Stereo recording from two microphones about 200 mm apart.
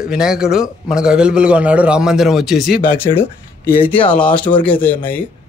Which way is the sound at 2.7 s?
50° left (ahead or behind).